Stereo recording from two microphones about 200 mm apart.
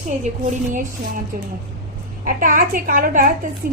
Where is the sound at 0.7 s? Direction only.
40° right (ahead or behind).